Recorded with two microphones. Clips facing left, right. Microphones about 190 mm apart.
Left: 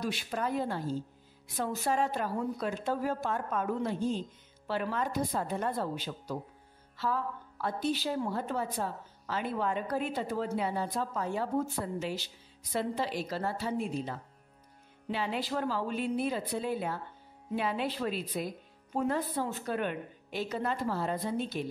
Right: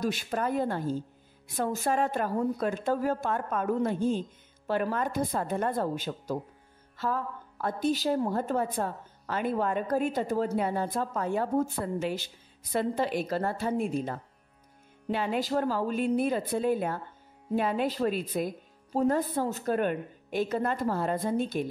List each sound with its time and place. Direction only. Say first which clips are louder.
0.0 s a woman's voice: right 4 dB; 50° right (ahead or behind)
18.9 s a woman's voice: right 5 dB; 40° right (ahead or behind)